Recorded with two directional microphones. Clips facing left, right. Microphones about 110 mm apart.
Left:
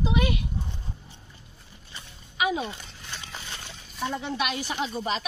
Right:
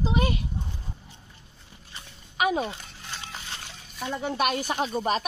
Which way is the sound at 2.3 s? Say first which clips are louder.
Right 2 dB; 50° right (ahead or behind).